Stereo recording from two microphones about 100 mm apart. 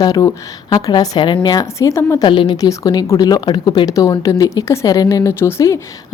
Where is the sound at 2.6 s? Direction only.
40° left (ahead or behind).